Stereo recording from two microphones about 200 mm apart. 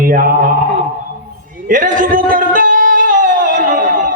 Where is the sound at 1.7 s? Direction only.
40° right (ahead or behind).